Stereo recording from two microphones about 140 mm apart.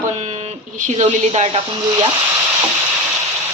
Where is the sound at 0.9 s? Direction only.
45° right (ahead or behind).